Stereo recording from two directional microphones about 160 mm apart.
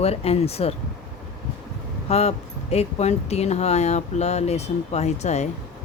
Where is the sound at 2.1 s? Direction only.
40° left (ahead or behind).